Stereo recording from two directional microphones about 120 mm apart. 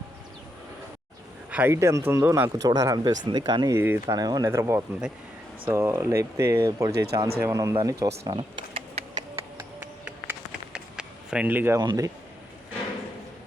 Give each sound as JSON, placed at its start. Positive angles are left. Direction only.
{"t": 1.5, "sound": "a sound", "side_deg": -15}
{"t": 1.7, "sound": "speech", "side_deg": -25}
{"t": 2.6, "sound": "speech", "side_deg": -30}
{"t": 3.8, "sound": "speech", "side_deg": -15}
{"t": 4.0, "sound": "speech", "side_deg": -30}
{"t": 4.4, "sound": "speech", "side_deg": -20}
{"t": 8.3, "sound": "a sound", "side_deg": -45}
{"t": 9.8, "sound": "a sound", "side_deg": -10}
{"t": 11.8, "sound": "speech", "side_deg": -35}